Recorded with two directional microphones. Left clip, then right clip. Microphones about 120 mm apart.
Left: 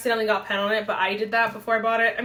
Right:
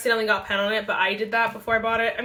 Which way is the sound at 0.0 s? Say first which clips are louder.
Right 1 dB; 20° right (ahead or behind).